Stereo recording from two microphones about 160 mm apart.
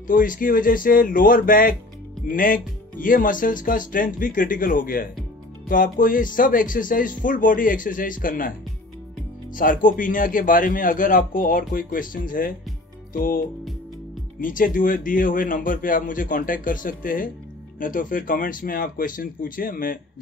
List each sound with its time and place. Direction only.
0.0 s a man's voice: 55° left (ahead or behind)
9.6 s a man's voice: 55° left (ahead or behind)
14.4 s a man's voice: 55° left (ahead or behind)